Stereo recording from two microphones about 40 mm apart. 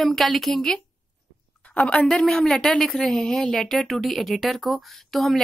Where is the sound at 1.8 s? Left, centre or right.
Left; by 5.4 s centre.